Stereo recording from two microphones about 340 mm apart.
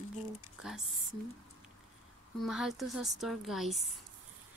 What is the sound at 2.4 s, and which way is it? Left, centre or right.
A woman's voice, centre.